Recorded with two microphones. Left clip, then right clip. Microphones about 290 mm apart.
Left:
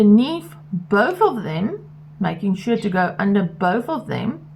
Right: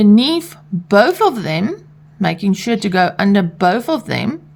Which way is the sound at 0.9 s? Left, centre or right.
Right.